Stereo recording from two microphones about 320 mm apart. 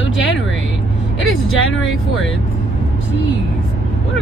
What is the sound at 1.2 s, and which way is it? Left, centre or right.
Vehicle, left.